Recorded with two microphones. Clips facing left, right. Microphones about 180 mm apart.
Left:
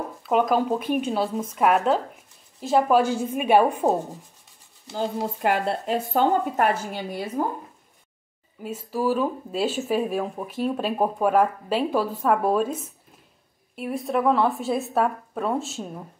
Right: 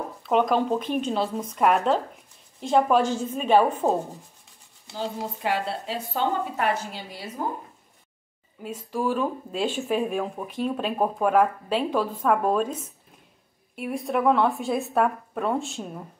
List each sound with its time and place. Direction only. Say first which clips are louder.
0.2 s a woman's voice: left 1 dB; 5° left (ahead or behind)
4.9 s speech: left 4 dB; 50° left (ahead or behind)
8.6 s a woman's voice: left 2 dB; 5° left (ahead or behind)